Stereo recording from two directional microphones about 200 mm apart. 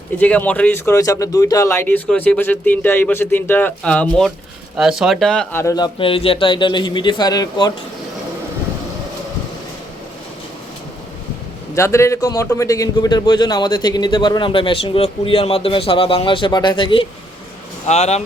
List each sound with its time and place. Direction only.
0.2 s a man's voice: 5° left (ahead or behind)
11.7 s a man's voice: 15° left (ahead or behind); by 18.2 s 30° left (ahead or behind)